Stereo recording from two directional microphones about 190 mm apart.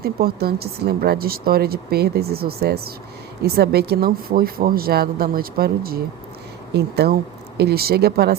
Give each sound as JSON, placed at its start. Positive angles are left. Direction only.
{"t": 0.0, "sound": "speech", "side_deg": -55}